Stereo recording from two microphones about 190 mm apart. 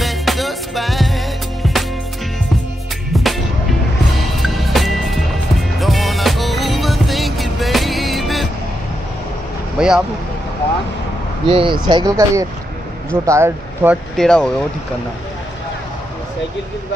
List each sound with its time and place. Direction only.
0.0 s music: centre (ahead or behind)
3.1 s music: centre (ahead or behind)
9.8 s a sound: 5° right (ahead or behind)
11.4 s speech: 25° right (ahead or behind)
14.1 s speech: 5° left (ahead or behind)